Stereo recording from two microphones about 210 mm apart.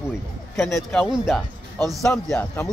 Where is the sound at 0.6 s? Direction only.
Centre (ahead or behind).